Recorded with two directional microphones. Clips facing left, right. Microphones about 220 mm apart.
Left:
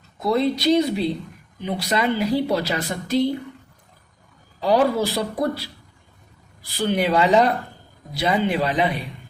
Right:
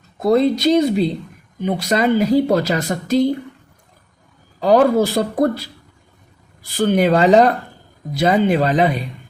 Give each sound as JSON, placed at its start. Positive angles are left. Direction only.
{"t": 0.2, "sound": "a woman's voice", "side_deg": -45}
{"t": 4.6, "sound": "a woman's voice", "side_deg": -45}